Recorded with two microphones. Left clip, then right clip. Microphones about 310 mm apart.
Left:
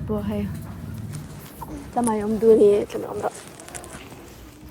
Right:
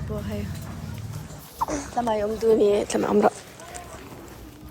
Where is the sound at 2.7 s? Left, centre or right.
Centre.